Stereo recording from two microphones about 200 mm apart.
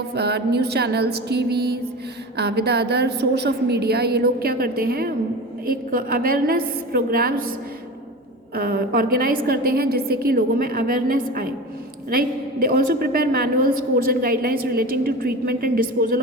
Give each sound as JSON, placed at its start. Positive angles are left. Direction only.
{"t": 0.1, "sound": "a woman's voice", "side_deg": -55}
{"t": 8.5, "sound": "a woman's voice", "side_deg": -50}